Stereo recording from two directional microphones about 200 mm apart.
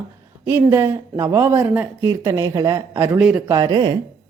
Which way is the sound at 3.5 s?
20° right (ahead or behind).